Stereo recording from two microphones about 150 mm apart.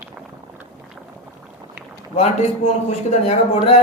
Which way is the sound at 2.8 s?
45° left (ahead or behind).